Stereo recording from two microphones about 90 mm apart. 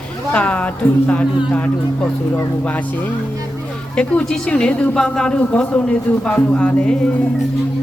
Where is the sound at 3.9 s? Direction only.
10° left (ahead or behind).